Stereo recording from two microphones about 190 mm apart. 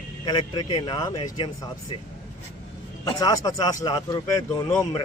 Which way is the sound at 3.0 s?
20° left (ahead or behind).